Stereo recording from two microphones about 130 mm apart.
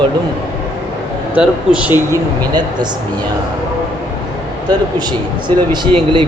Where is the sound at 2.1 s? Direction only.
35° right (ahead or behind).